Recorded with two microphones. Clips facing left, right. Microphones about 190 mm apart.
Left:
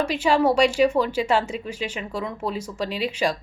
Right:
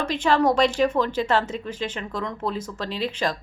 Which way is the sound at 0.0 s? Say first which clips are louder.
Left 1 dB; 10° left (ahead or behind).